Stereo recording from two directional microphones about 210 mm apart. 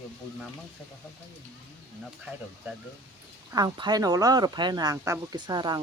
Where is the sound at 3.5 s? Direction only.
20° right (ahead or behind).